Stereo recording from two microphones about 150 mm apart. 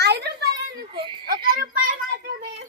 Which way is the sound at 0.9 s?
35° right (ahead or behind).